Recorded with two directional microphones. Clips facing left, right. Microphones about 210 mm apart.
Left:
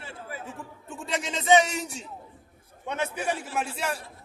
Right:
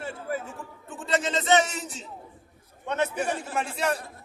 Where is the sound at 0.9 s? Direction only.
15° left (ahead or behind).